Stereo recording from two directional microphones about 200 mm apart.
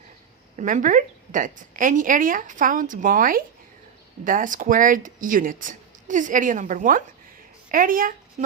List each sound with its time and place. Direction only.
0.5 s a woman's voice: 40° right (ahead or behind)